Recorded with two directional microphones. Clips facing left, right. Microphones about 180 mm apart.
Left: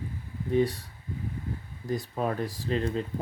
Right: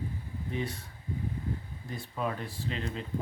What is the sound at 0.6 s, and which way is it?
Speech, 35° left (ahead or behind).